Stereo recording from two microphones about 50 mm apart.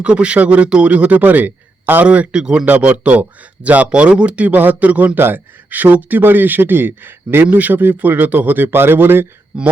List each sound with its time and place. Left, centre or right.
0.0 s speech: right
2.0 s speech: right
2.6 s speech: right
5.1 s a man's voice: right
9.5 s speech: right